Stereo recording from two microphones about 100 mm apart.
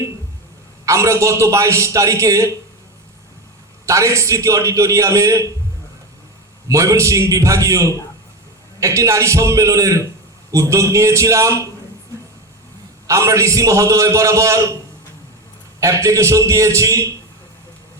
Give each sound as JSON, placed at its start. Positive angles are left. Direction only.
{"t": 0.9, "sound": "a man's voice", "side_deg": -30}
{"t": 3.8, "sound": "a man's voice", "side_deg": -30}
{"t": 6.7, "sound": "a man's voice", "side_deg": -30}
{"t": 13.1, "sound": "a man's voice", "side_deg": -30}
{"t": 15.8, "sound": "a man's voice", "side_deg": -30}